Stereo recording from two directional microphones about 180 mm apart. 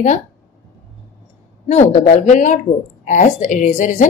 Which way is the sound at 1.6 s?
40° left (ahead or behind).